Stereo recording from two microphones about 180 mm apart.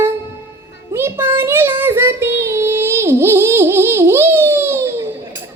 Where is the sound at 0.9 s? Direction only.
10° right (ahead or behind).